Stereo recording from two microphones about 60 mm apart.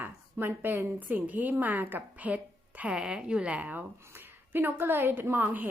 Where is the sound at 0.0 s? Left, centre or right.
Right.